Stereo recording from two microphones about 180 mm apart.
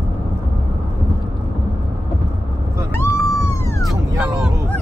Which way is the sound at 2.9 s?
15° left (ahead or behind).